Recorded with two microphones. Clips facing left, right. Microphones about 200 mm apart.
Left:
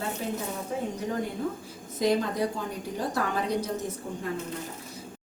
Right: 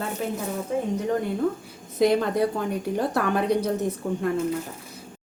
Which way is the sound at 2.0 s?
60° right (ahead or behind).